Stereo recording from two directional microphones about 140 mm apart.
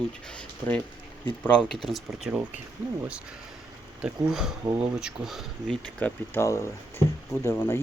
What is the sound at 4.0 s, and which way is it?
Speech, 5° right (ahead or behind).